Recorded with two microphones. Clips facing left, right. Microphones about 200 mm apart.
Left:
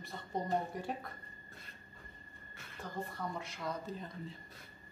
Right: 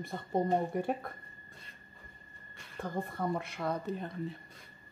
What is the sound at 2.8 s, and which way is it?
Speech, 55° right (ahead or behind).